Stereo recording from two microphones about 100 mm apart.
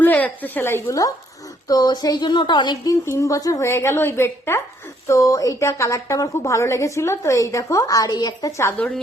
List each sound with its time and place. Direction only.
0.0 s a woman's voice: 15° left (ahead or behind); by 2.7 s 50° left (ahead or behind)
2.8 s a woman's voice: 30° left (ahead or behind)